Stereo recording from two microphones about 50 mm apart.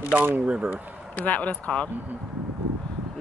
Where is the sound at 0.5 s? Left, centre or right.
Right.